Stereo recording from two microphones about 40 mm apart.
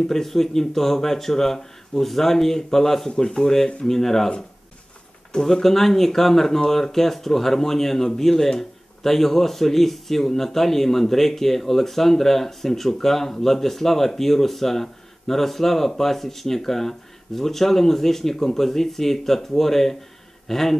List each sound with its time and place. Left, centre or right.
0.0 s speech: centre
5.4 s speech: centre